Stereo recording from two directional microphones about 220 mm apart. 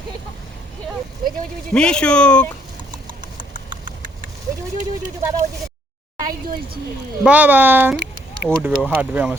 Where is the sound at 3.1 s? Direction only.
40° right (ahead or behind).